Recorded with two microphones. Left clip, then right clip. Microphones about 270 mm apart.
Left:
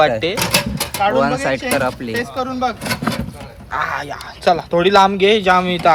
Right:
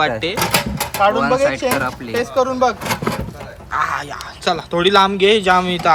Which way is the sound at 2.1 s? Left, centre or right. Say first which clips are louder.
Right 4 dB; centre.